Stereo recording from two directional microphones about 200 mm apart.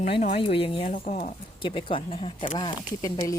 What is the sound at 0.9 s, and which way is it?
Speech, 35° left (ahead or behind).